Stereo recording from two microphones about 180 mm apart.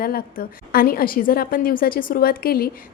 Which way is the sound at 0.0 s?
55° left (ahead or behind).